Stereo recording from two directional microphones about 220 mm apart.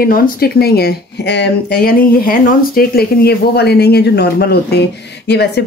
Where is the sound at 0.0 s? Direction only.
45° left (ahead or behind).